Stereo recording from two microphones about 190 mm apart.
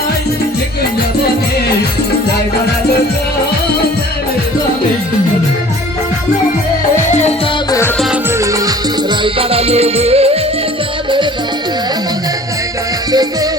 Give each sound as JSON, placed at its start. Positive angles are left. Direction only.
{"t": 6.9, "sound": "music", "side_deg": 35}
{"t": 9.2, "sound": "music", "side_deg": -30}
{"t": 13.1, "sound": "music", "side_deg": -20}